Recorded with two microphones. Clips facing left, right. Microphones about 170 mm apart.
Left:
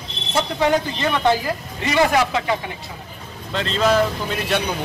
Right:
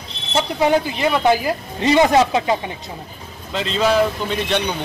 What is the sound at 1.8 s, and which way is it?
Speech, 25° right (ahead or behind).